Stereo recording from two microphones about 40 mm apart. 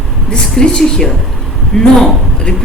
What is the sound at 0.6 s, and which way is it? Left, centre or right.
A man's voice, centre.